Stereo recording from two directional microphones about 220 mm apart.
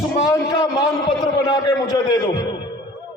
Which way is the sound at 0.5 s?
20° left (ahead or behind).